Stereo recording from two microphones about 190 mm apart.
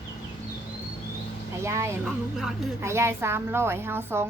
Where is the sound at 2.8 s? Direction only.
15° right (ahead or behind).